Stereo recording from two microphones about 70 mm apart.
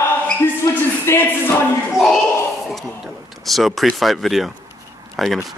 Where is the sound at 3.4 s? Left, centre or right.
Centre.